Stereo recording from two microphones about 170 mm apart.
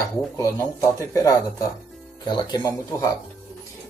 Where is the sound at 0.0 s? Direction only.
20° left (ahead or behind).